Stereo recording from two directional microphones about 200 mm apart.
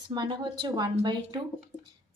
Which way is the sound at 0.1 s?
25° right (ahead or behind).